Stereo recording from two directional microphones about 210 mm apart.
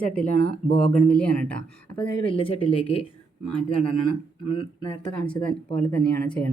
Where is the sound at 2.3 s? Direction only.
25° left (ahead or behind).